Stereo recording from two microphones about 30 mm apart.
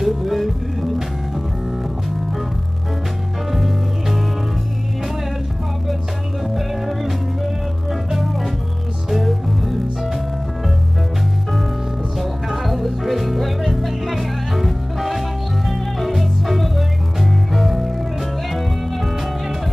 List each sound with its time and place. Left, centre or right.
0.0 s music: centre
3.5 s music: centre
6.5 s music: centre
12.2 s music: centre